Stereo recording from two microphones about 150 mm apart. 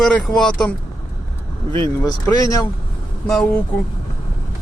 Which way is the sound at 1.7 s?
20° left (ahead or behind).